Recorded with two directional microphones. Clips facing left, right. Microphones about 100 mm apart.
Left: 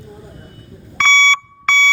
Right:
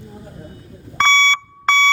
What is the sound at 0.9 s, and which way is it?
Alarm, 35° right (ahead or behind).